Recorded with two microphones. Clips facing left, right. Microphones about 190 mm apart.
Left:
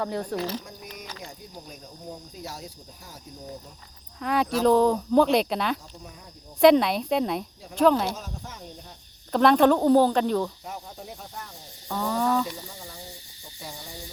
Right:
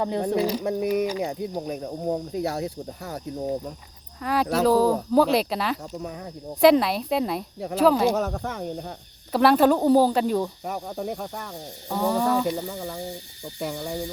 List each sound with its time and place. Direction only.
0.3 s speech: 15° right (ahead or behind)
0.6 s speech: 70° right (ahead or behind)
4.2 s speech: centre (ahead or behind)
6.0 s speech: 70° right (ahead or behind)
6.6 s speech: centre (ahead or behind)
8.1 s speech: 65° right (ahead or behind)
9.3 s speech: 5° right (ahead or behind)
10.6 s speech: 70° right (ahead or behind)
11.9 s speech: 15° right (ahead or behind)
12.5 s speech: 65° right (ahead or behind)